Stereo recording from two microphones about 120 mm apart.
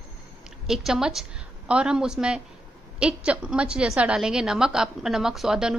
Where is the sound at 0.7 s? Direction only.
5° right (ahead or behind).